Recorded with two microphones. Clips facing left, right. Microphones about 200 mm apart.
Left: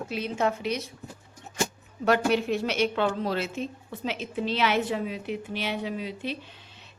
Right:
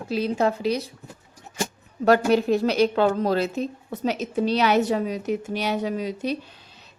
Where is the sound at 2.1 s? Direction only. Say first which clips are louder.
Right 5 dB; 40° right (ahead or behind).